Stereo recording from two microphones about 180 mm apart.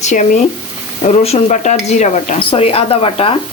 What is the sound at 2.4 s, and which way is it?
Speech, 30° left (ahead or behind).